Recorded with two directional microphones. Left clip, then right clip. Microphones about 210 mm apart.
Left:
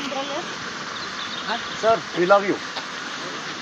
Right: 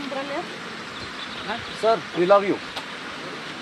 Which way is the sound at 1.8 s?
Centre (ahead or behind).